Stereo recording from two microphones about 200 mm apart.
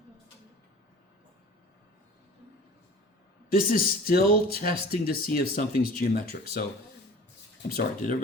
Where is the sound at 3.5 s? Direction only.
45° left (ahead or behind).